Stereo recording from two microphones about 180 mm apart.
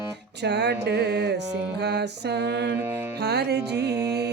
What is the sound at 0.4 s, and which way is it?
Music, 70° right (ahead or behind).